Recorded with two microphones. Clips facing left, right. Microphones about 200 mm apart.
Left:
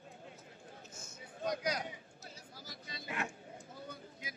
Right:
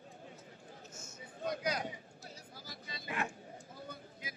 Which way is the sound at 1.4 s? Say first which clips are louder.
Even; 55° right (ahead or behind).